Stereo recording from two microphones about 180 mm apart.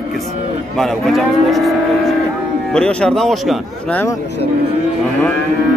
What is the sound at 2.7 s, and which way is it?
Speech, 5° left (ahead or behind).